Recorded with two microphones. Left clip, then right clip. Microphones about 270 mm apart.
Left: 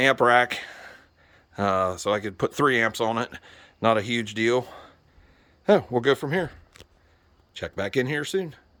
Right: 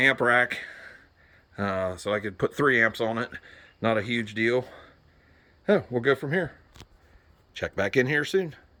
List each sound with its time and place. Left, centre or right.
0.0 s speech: centre
7.5 s speech: centre